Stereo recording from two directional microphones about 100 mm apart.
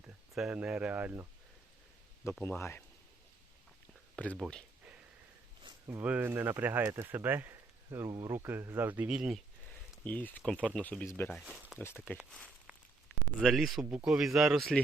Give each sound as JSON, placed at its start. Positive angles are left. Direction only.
{"t": 0.3, "sound": "speech", "side_deg": -10}
{"t": 2.4, "sound": "speech", "side_deg": 25}
{"t": 4.1, "sound": "speech", "side_deg": 15}
{"t": 6.0, "sound": "speech", "side_deg": -15}
{"t": 8.0, "sound": "speech", "side_deg": -30}
{"t": 10.0, "sound": "speech", "side_deg": 15}
{"t": 10.4, "sound": "speech", "side_deg": 5}
{"t": 11.4, "sound": "speech", "side_deg": -10}
{"t": 13.4, "sound": "speech", "side_deg": 0}